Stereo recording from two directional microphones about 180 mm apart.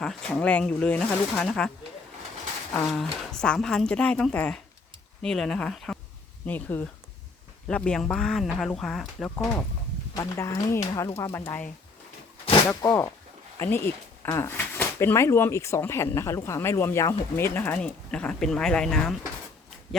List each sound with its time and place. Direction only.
0.0 s speech: 5° left (ahead or behind)
2.7 s speech: 5° left (ahead or behind)
10.2 s speech: 15° left (ahead or behind)
12.8 s speech: 20° left (ahead or behind); by 19.1 s 5° left (ahead or behind)